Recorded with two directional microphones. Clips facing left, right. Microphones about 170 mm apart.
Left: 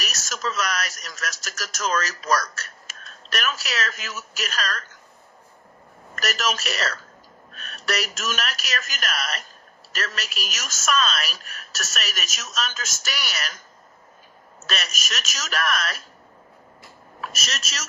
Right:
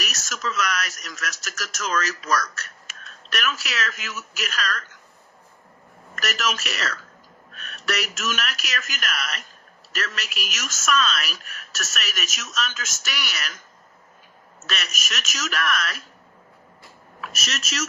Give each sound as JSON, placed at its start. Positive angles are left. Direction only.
{"t": 0.0, "sound": "speech", "side_deg": 35}
{"t": 6.1, "sound": "speech", "side_deg": 35}
{"t": 14.7, "sound": "speech", "side_deg": 35}
{"t": 17.2, "sound": "speech", "side_deg": 35}